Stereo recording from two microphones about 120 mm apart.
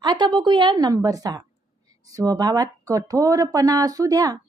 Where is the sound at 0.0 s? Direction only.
40° right (ahead or behind).